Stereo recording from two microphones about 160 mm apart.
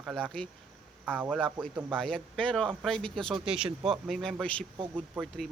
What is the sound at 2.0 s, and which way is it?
Speech, 5° left (ahead or behind).